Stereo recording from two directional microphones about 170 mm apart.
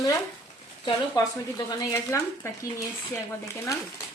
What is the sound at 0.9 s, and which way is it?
Speech, 20° left (ahead or behind).